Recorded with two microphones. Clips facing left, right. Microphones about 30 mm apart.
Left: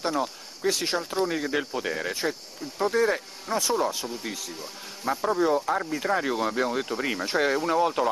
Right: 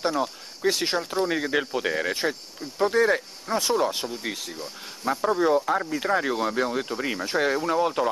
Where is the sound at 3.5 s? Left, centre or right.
Right.